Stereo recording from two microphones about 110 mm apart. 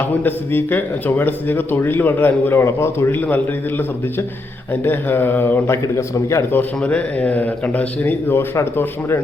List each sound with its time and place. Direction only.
0.2 s speech: 15° left (ahead or behind)